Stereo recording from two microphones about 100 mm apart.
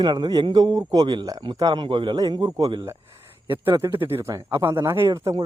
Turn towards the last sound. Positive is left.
turn(degrees=-35)  # may be behind; listen again after turning